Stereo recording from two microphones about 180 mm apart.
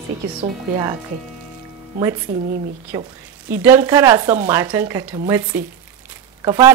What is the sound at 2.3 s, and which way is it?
Speech, 40° right (ahead or behind).